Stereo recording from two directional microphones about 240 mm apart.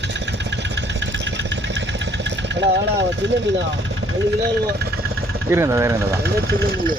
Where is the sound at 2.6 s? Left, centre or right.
Right.